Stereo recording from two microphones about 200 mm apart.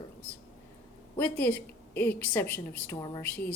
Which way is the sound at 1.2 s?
10° left (ahead or behind).